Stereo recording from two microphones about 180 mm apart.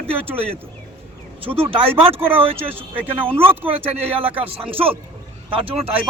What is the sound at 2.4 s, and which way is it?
Speech, 30° right (ahead or behind).